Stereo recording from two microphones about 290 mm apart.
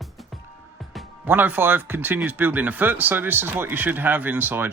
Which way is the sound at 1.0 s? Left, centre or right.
Centre.